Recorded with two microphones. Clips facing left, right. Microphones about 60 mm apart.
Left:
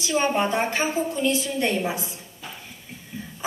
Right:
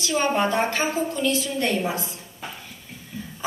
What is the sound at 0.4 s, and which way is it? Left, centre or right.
A woman's voice, centre.